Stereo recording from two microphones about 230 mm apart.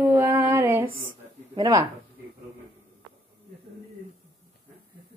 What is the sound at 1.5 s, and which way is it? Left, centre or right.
Speech, centre.